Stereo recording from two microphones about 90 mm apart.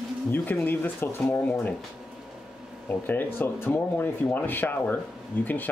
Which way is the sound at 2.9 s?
25° left (ahead or behind).